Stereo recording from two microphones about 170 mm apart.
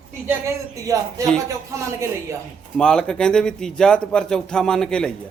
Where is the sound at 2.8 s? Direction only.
5° left (ahead or behind).